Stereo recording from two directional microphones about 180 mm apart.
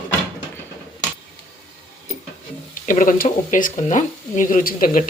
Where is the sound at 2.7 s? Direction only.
45° left (ahead or behind).